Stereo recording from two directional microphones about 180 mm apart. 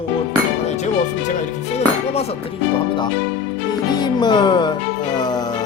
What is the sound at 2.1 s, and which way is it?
Speech, 35° left (ahead or behind).